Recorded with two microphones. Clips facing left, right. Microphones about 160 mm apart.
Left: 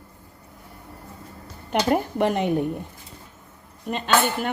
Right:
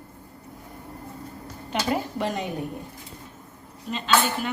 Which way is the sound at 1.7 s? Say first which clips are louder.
Left 5 dB; 55° left (ahead or behind).